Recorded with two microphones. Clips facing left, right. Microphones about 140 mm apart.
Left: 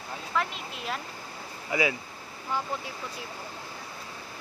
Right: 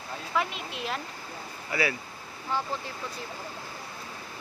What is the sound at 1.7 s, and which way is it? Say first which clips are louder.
Speech: left 2 dB; 15° left (ahead or behind).